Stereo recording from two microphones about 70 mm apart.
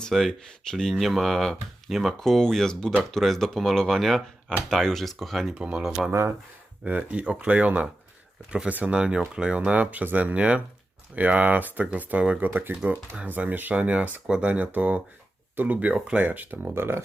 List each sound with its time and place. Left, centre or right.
0.0 s speech: centre
5.5 s speech: centre
6.1 s speech: right
6.8 s speech: centre
12.5 s speech: right